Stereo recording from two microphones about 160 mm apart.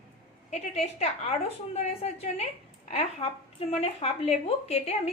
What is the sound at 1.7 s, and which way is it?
A woman's voice, 40° left (ahead or behind).